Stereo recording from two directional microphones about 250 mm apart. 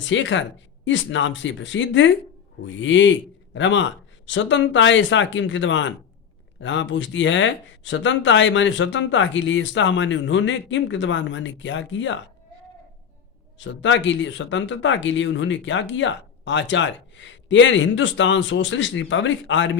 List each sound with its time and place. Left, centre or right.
0.0 s speech: left
13.7 s speech: left